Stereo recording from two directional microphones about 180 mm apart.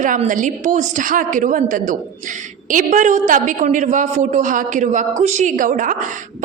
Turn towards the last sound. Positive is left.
turn(degrees=-45)  # may be behind; listen again after turning